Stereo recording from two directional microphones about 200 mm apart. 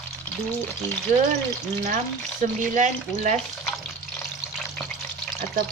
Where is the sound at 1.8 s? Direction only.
40° right (ahead or behind).